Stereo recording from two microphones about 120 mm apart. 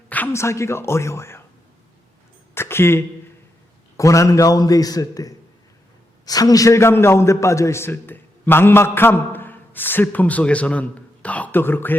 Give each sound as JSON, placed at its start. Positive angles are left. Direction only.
{"t": 0.1, "sound": "a man's voice", "side_deg": 20}
{"t": 2.6, "sound": "a sound", "side_deg": 20}
{"t": 3.9, "sound": "a man's voice", "side_deg": 25}